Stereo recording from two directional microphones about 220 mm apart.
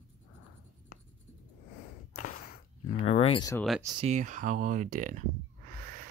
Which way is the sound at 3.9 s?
30° right (ahead or behind).